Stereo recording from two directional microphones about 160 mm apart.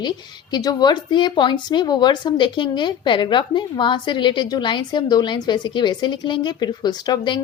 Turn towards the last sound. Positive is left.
turn(degrees=25)  # may be behind; listen again after turning